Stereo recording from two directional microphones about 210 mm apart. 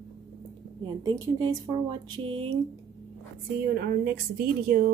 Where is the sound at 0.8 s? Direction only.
20° right (ahead or behind).